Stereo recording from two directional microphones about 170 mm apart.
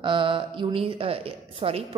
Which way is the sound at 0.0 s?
30° right (ahead or behind).